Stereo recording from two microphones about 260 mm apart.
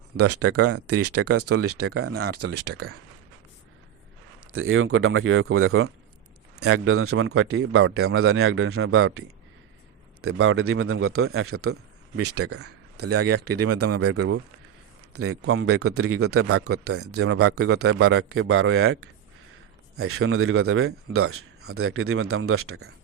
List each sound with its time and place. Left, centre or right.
0.2 s speech: right
4.5 s speech: right
14.2 s speech: right
15.1 s speech: right